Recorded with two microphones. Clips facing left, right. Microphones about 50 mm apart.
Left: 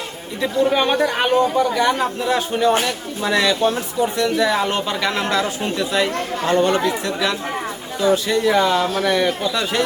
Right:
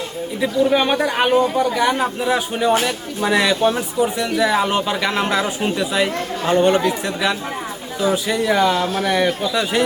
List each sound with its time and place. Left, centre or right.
0.4 s a man's voice: centre